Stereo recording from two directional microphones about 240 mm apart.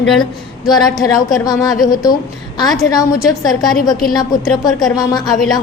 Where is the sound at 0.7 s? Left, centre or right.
Centre.